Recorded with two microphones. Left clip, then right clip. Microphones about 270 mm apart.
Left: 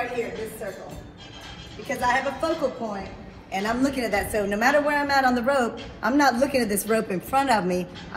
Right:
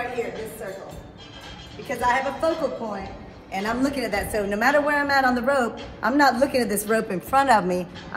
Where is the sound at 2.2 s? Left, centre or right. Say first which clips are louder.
Right 2 dB; right.